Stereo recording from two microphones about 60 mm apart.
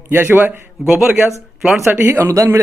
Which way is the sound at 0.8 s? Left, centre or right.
Centre.